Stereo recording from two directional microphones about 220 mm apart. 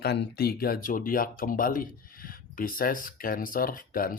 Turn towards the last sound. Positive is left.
turn(degrees=40)  # may be behind; listen again after turning